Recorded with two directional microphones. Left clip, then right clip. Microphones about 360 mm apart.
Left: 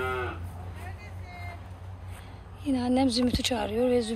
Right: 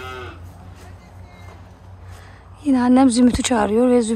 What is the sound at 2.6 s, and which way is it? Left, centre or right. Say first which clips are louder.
Speech: right 11 dB; right.